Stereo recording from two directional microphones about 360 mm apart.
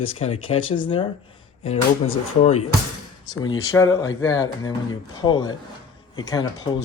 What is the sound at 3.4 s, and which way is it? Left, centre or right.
Speech, centre.